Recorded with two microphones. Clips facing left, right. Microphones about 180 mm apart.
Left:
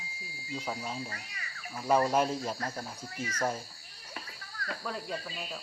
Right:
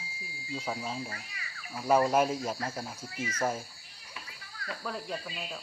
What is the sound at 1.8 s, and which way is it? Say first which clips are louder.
Speech: right 2 dB; 5° right (ahead or behind).